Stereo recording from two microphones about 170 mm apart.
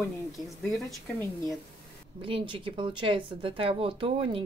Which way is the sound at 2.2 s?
30° right (ahead or behind).